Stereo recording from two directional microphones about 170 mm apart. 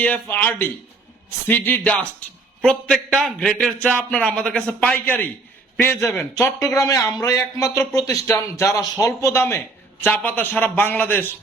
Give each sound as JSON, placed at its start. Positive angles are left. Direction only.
{"t": 0.0, "sound": "a man's voice", "side_deg": 10}